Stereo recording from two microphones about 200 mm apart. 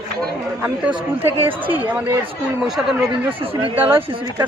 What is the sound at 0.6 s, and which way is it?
A woman's voice, 10° right (ahead or behind).